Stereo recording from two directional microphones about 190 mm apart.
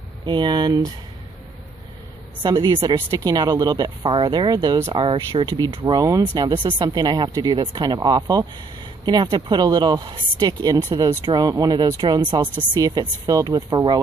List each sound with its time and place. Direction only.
0.2 s speech: 25° right (ahead or behind)
2.4 s speech: 25° right (ahead or behind)